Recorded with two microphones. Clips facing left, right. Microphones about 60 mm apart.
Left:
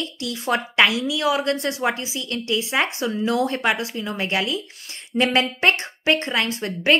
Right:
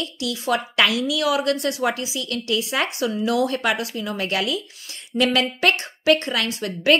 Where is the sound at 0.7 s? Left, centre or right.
Left.